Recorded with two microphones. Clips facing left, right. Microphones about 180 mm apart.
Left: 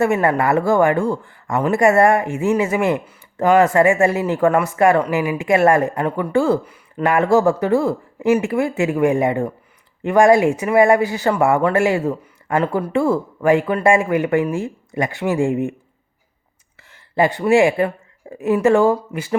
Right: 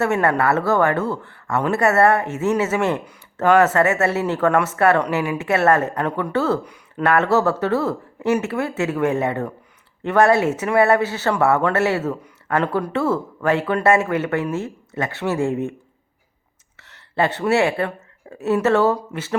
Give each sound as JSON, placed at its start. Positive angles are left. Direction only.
{"t": 0.0, "sound": "speech", "side_deg": 10}
{"t": 16.7, "sound": "a woman's voice", "side_deg": 10}